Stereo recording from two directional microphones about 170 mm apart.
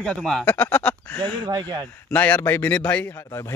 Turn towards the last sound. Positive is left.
turn(degrees=15)  # may be behind; listen again after turning